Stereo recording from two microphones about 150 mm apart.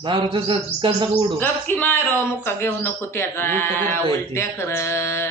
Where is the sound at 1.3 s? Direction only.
15° left (ahead or behind).